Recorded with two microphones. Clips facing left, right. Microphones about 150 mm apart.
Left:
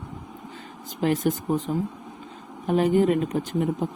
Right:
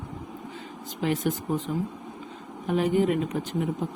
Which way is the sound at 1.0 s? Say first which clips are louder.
Left 4 dB; 40° left (ahead or behind).